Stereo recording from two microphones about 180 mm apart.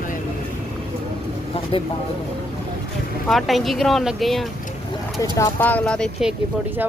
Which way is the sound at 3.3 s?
Centre (ahead or behind).